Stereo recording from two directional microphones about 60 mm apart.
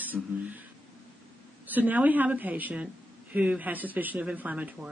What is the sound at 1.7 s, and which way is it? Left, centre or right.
A man's voice, right.